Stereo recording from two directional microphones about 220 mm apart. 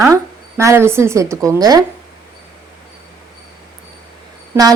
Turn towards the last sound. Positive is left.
turn(degrees=-10)  # may be behind; listen again after turning